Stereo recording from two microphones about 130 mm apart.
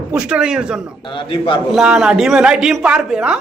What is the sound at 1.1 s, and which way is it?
Speech, 40° left (ahead or behind).